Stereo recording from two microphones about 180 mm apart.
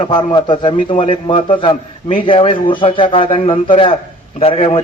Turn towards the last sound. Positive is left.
turn(degrees=35)  # may be behind; listen again after turning